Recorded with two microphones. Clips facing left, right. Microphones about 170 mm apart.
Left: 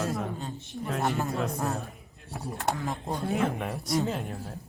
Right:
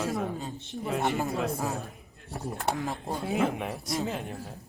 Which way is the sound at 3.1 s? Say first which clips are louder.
Even; centre (ahead or behind).